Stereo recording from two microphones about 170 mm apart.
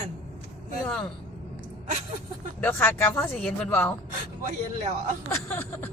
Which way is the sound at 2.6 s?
15° left (ahead or behind).